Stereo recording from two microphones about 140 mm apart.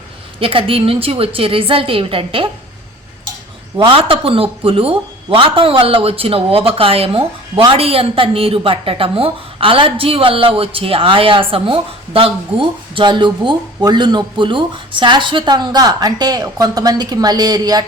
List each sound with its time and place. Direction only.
0.3 s speech: 40° right (ahead or behind)
3.8 s speech: 40° right (ahead or behind)